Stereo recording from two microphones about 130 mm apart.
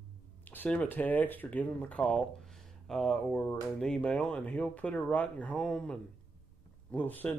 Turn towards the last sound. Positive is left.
turn(degrees=15)  # may be behind; listen again after turning